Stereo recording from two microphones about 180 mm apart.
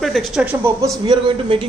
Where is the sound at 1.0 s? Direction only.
25° right (ahead or behind).